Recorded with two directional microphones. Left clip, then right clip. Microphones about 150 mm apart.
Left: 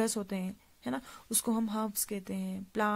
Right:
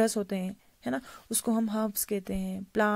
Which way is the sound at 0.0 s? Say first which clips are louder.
Right 6 dB; 30° right (ahead or behind).